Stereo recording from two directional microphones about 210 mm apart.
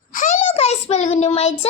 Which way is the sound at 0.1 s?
35° left (ahead or behind).